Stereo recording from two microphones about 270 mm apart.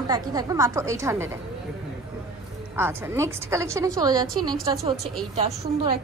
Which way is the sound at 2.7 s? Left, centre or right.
Centre.